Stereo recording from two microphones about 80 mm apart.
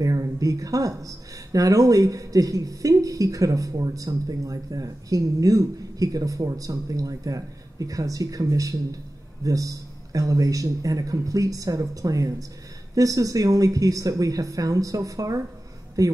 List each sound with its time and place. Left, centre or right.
0.0 s speech: right